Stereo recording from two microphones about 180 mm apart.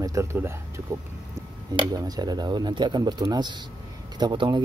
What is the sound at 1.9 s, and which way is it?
Speech, 20° right (ahead or behind).